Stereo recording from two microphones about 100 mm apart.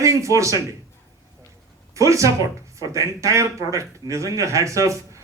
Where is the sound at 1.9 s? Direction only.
30° right (ahead or behind).